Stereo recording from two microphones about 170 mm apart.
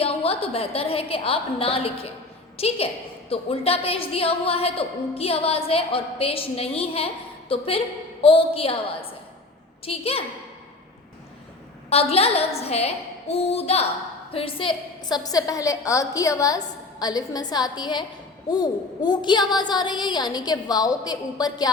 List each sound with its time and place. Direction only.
0.0 s a woman's voice: 35° left (ahead or behind)
12.1 s a woman's voice: 35° left (ahead or behind)